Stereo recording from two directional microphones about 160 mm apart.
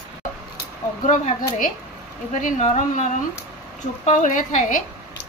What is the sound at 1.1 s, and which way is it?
A woman's voice, 55° left (ahead or behind).